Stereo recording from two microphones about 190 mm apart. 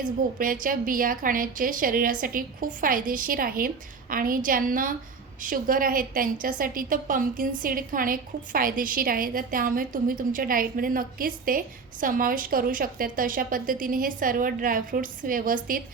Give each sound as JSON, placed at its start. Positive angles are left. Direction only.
{"t": 0.0, "sound": "a woman's voice", "side_deg": -45}